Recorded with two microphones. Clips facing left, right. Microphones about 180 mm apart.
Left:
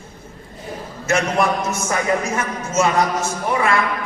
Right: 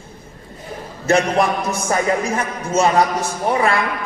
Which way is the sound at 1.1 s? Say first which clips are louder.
Right 3 dB; 35° right (ahead or behind).